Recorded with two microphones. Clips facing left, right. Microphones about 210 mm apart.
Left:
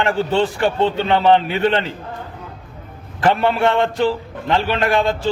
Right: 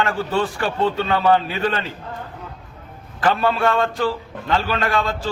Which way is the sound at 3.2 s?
25° left (ahead or behind).